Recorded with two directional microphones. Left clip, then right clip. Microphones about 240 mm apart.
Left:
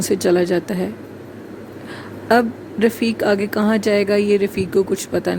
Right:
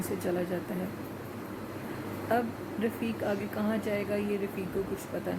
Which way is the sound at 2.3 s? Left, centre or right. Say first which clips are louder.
Left 14 dB; left.